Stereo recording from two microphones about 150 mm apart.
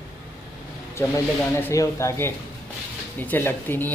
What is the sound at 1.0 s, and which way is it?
Speech, 15° left (ahead or behind).